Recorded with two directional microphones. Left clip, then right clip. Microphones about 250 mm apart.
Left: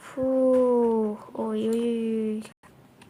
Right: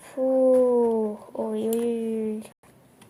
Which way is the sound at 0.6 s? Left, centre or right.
Left.